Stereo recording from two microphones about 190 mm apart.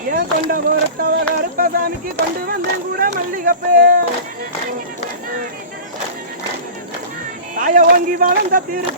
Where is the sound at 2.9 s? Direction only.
50° right (ahead or behind).